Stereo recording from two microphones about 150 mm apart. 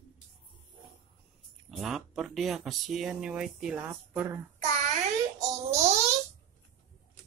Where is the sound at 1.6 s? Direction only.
Centre (ahead or behind).